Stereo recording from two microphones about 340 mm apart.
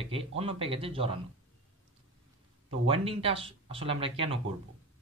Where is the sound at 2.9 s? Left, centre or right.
Centre.